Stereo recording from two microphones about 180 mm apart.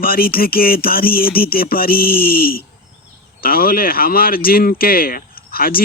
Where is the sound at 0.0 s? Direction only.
55° left (ahead or behind).